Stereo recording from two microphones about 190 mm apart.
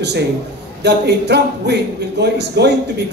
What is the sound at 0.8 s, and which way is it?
Speech, 60° right (ahead or behind).